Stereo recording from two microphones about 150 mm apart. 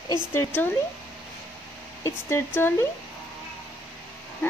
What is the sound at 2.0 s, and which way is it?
Speech, 15° left (ahead or behind).